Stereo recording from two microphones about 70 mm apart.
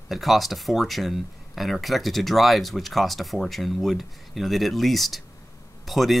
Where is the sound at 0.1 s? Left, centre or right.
Centre.